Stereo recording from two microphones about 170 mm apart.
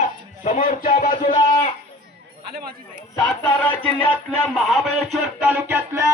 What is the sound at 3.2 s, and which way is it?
Speech, 10° left (ahead or behind).